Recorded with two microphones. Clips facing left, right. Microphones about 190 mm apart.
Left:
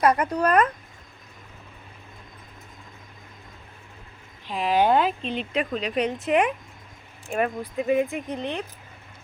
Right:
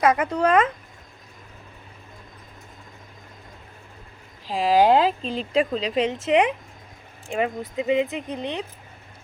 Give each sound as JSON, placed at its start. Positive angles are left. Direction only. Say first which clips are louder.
{"t": 0.2, "sound": "speech", "louder": "right 1 dB", "side_deg": -90}
{"t": 4.4, "sound": "speech", "louder": "right 3 dB", "side_deg": -35}
{"t": 6.1, "sound": "speech", "louder": "right 2 dB", "side_deg": -90}
{"t": 7.3, "sound": "speech", "louder": "even", "side_deg": -20}